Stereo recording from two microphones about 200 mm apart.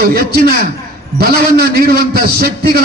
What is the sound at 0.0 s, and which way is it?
A man's voice, 50° right (ahead or behind).